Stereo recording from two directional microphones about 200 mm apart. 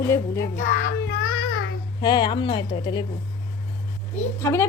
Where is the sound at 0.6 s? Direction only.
60° left (ahead or behind).